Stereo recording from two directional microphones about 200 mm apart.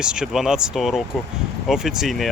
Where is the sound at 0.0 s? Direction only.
5° right (ahead or behind).